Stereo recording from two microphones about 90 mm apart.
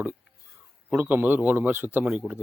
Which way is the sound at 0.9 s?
20° right (ahead or behind).